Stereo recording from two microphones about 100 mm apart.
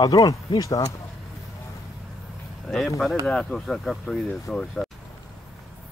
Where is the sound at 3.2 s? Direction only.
5° left (ahead or behind).